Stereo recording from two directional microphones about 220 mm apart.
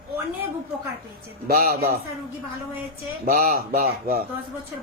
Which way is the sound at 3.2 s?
40° right (ahead or behind).